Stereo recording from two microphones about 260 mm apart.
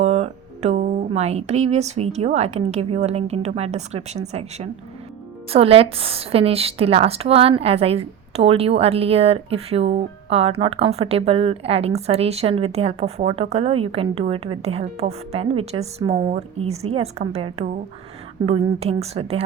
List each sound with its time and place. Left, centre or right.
0.0 s a woman's voice: right